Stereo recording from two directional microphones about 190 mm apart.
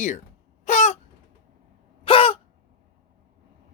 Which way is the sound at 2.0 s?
30° left (ahead or behind).